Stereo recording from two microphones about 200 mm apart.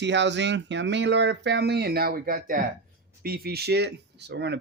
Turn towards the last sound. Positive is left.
turn(degrees=-60)  # may be behind; listen again after turning